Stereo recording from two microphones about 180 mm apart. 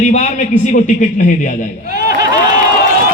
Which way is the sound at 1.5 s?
55° left (ahead or behind).